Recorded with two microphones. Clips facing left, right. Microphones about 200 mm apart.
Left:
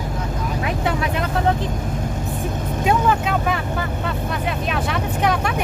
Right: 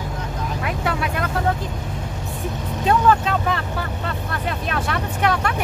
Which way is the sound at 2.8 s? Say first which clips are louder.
Right 2 dB; 10° left (ahead or behind).